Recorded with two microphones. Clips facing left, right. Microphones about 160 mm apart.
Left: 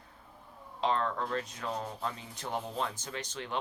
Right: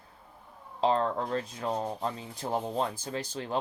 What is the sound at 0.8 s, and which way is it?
Speech, 35° right (ahead or behind).